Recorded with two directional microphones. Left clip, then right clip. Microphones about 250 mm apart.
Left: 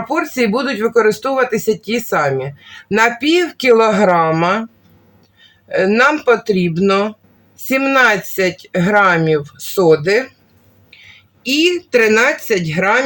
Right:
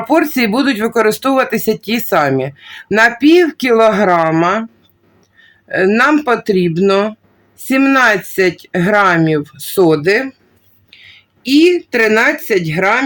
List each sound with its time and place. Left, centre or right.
0.1 s speech: right
5.6 s speech: right
11.4 s speech: right